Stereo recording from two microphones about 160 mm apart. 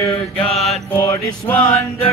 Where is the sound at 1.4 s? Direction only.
15° left (ahead or behind).